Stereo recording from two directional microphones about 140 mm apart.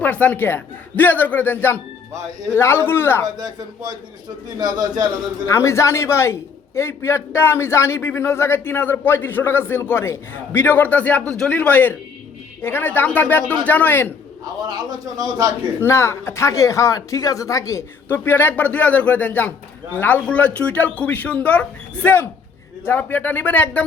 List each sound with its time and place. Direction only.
0.0 s a man's voice: 10° left (ahead or behind)
3.2 s speech: 30° right (ahead or behind)
4.6 s speech: 30° right (ahead or behind)
5.5 s a man's voice: 20° left (ahead or behind)
14.7 s speech: 30° right (ahead or behind)
15.8 s a man's voice: 20° left (ahead or behind)